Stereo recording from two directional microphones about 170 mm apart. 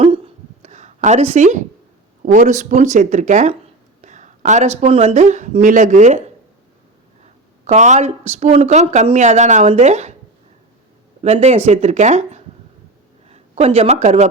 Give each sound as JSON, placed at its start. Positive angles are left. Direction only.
{"t": 0.6, "sound": "a sound", "side_deg": -45}
{"t": 2.2, "sound": "a woman's voice", "side_deg": -50}
{"t": 7.6, "sound": "a woman's voice", "side_deg": -45}
{"t": 11.2, "sound": "a woman's voice", "side_deg": -40}